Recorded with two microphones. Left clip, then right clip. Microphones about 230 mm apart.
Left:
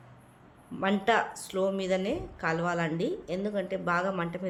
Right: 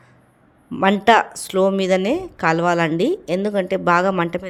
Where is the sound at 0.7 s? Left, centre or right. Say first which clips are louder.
Right 12 dB; right.